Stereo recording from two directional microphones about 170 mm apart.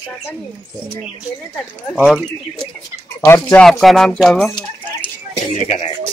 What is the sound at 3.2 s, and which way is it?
Speech, 10° left (ahead or behind).